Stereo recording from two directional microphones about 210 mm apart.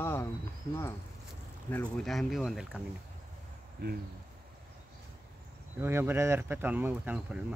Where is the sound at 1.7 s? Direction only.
5° left (ahead or behind).